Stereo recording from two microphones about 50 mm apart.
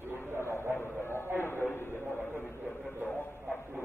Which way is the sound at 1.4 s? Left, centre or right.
Left.